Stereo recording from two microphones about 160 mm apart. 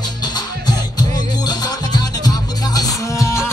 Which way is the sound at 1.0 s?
25° left (ahead or behind).